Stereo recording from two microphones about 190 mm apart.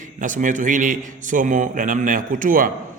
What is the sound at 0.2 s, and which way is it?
A man's voice, 40° right (ahead or behind).